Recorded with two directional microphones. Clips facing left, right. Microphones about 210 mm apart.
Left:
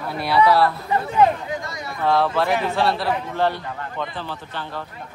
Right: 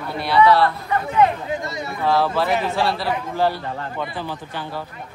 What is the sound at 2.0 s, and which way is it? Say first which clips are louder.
A man's voice: even; centre (ahead or behind).